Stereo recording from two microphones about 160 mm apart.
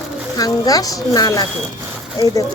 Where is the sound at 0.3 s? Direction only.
25° left (ahead or behind).